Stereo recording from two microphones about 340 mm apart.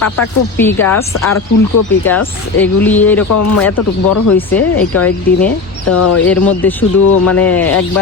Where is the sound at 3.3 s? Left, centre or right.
Left.